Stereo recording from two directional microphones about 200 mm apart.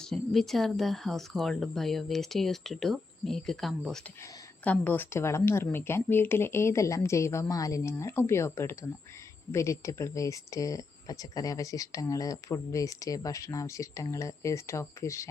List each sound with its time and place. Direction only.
0.0 s speech: centre (ahead or behind)